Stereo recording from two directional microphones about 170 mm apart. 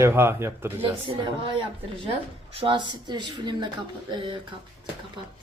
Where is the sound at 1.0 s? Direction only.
30° right (ahead or behind).